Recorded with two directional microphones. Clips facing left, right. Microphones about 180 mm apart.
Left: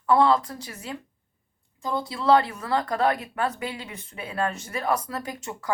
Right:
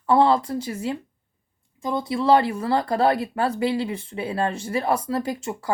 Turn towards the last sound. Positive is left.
turn(degrees=-30)  # may be behind; listen again after turning